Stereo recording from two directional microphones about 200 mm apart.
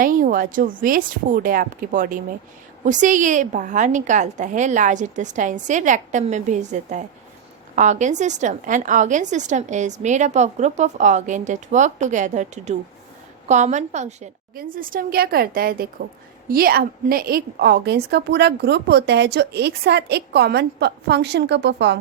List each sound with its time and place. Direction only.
0.0 s a woman's voice: 45° right (ahead or behind); by 21.9 s 60° right (ahead or behind)